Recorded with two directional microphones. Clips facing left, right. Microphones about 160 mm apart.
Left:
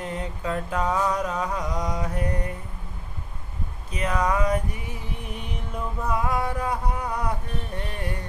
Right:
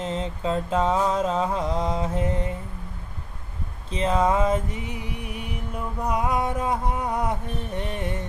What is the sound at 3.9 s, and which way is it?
Music, 25° right (ahead or behind).